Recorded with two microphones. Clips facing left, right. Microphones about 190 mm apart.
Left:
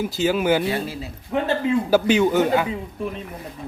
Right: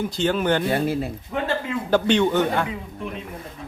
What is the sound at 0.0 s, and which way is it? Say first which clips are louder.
Speech: left 1 dB; 5° left (ahead or behind).